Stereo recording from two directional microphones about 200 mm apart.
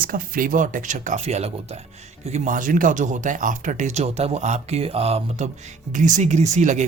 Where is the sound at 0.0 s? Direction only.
45° right (ahead or behind).